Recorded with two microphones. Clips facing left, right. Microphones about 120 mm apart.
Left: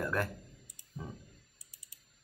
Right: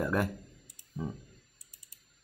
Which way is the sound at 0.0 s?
15° right (ahead or behind).